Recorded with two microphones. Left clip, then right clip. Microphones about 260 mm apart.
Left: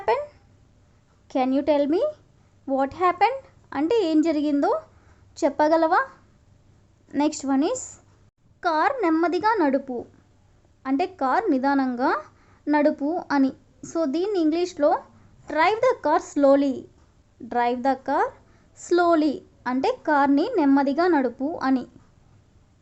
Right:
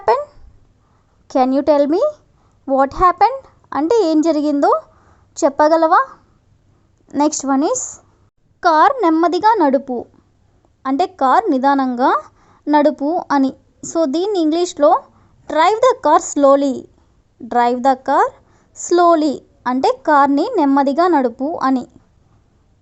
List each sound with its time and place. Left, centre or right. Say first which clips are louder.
0.0 s a sound: right 8 dB; centre
1.3 s a woman's voice: right 8 dB; centre
7.1 s a woman's voice: right 8 dB; centre